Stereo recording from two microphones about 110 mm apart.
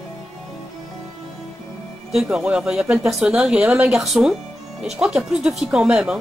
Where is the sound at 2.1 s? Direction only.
5° right (ahead or behind).